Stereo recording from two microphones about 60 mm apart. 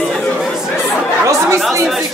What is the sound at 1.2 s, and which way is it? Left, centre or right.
Speech, right.